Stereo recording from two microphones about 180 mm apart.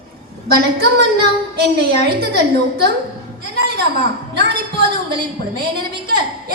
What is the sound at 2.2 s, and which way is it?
Speech, 65° right (ahead or behind).